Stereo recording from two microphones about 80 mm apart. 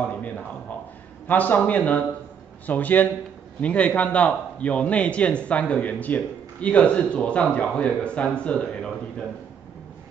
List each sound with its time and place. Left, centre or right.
1.2 s a man's voice: left